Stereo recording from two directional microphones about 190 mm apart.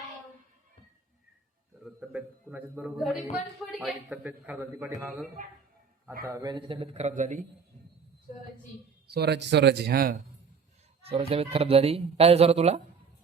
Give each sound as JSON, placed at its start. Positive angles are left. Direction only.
{"t": 1.8, "sound": "a man's voice", "side_deg": -5}
{"t": 6.2, "sound": "speech", "side_deg": -15}
{"t": 9.0, "sound": "speech", "side_deg": -60}
{"t": 11.0, "sound": "speech", "side_deg": -30}